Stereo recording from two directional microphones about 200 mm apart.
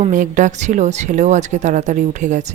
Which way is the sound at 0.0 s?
40° right (ahead or behind).